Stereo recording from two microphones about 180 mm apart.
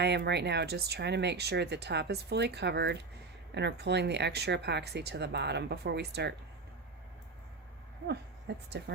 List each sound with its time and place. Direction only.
0.0 s speech: 70° right (ahead or behind)
8.0 s speech: 65° right (ahead or behind)